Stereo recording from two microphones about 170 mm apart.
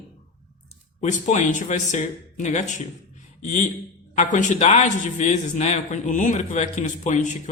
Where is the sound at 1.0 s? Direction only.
45° left (ahead or behind).